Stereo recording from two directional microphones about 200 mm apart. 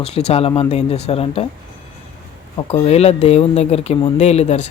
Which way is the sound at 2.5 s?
30° left (ahead or behind).